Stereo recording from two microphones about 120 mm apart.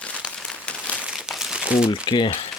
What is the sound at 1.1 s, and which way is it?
Crumpling, 5° right (ahead or behind).